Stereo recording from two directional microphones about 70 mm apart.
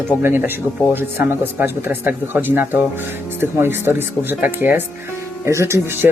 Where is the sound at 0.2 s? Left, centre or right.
Right.